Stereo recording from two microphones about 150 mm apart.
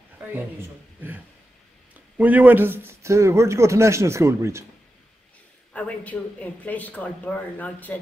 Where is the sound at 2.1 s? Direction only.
10° right (ahead or behind).